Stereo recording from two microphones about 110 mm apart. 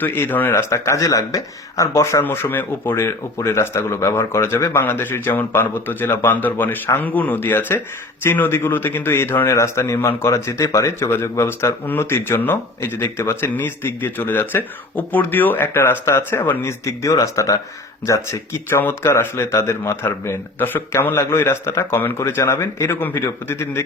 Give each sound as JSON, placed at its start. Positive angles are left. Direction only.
{"t": 0.0, "sound": "speech", "side_deg": 20}